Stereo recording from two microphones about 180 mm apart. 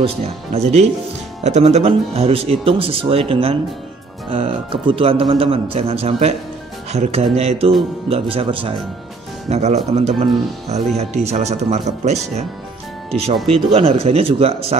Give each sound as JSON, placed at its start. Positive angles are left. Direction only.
{"t": 0.0, "sound": "speech", "side_deg": -35}